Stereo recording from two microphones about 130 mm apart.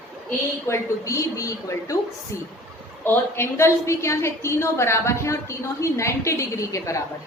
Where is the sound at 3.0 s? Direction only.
15° left (ahead or behind).